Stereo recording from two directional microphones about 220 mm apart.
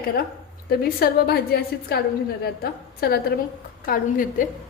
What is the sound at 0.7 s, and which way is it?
A woman's voice, 45° left (ahead or behind).